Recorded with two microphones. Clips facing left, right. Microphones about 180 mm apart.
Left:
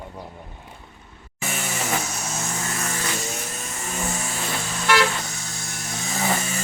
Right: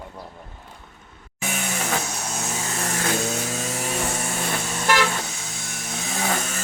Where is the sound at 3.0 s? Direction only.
65° right (ahead or behind).